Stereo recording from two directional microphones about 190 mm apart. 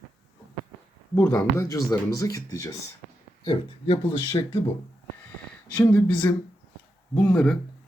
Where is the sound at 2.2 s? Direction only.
20° left (ahead or behind).